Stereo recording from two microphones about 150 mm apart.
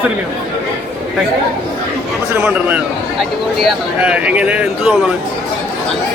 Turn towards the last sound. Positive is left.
turn(degrees=-10)  # may be behind; listen again after turning